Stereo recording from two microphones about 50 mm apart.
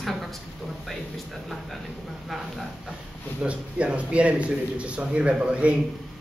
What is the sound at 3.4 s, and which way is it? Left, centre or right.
A man's voice, right.